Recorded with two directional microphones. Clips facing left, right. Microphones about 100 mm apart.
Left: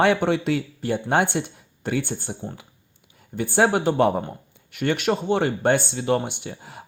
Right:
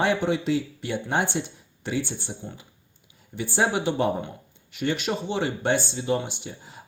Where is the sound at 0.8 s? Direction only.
40° left (ahead or behind).